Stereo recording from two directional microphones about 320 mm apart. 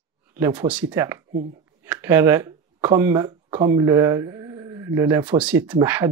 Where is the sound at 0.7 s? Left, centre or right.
Centre.